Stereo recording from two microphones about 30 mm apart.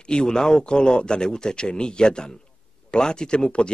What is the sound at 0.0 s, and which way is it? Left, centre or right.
Speech, left.